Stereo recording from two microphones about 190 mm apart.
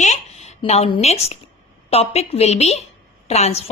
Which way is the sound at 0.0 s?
35° left (ahead or behind).